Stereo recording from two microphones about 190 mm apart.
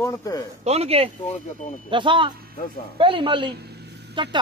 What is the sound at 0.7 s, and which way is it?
Speech, 35° right (ahead or behind).